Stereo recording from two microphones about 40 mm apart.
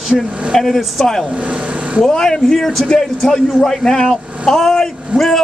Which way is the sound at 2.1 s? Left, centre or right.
Centre.